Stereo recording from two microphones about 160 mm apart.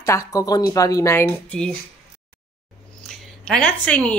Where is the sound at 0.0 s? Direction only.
20° left (ahead or behind).